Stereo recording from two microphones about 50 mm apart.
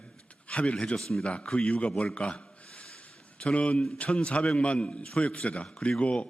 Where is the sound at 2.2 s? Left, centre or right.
Left.